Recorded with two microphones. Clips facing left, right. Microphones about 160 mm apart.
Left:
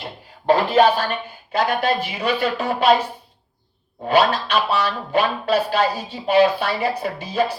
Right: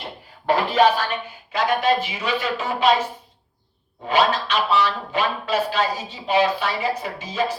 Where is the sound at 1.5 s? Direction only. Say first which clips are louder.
Even; 60° left (ahead or behind).